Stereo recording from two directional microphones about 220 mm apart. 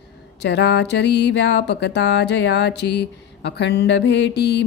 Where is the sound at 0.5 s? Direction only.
50° left (ahead or behind).